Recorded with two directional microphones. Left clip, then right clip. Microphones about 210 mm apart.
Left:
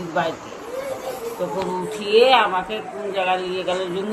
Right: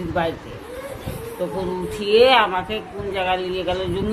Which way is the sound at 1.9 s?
20° right (ahead or behind).